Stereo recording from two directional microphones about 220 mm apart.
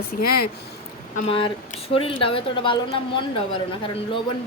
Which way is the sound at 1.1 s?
25° left (ahead or behind).